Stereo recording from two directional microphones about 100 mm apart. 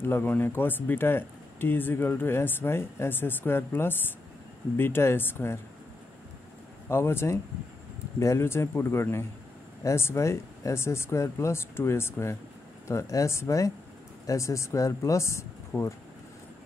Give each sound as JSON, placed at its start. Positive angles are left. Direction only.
{"t": 0.0, "sound": "speech", "side_deg": 25}
{"t": 6.9, "sound": "speech", "side_deg": 25}